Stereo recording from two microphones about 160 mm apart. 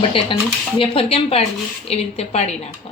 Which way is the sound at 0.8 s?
35° left (ahead or behind).